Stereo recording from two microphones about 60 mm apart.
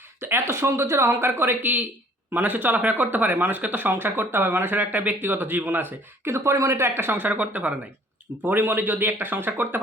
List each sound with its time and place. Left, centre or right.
0.2 s speech: right
6.3 s speech: right